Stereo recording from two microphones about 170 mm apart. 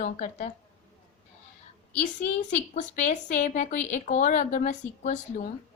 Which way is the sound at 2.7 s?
45° left (ahead or behind).